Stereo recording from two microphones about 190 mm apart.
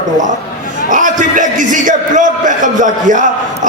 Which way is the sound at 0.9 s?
45° right (ahead or behind).